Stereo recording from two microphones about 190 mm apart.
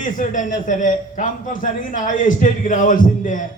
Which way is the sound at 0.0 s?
45° left (ahead or behind).